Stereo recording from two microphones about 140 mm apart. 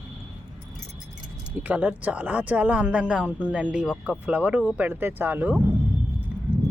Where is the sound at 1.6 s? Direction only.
10° right (ahead or behind).